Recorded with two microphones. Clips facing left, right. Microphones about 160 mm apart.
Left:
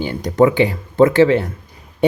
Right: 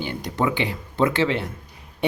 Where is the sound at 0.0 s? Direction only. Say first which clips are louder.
Left 10 dB; 45° left (ahead or behind).